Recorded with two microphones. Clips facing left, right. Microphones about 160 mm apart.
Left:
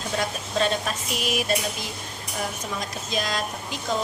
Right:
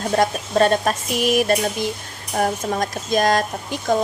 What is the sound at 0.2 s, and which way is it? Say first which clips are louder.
A woman's voice: right 8 dB; 50° right (ahead or behind).